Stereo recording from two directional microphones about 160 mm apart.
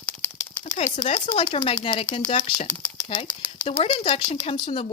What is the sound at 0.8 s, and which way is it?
Speech, 45° left (ahead or behind).